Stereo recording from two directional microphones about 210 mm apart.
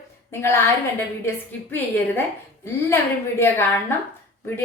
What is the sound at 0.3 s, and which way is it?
A woman's voice, 10° left (ahead or behind).